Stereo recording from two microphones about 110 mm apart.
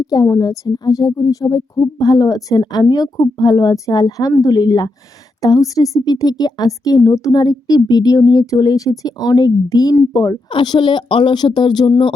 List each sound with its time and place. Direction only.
0.0 s a woman's voice: 35° left (ahead or behind)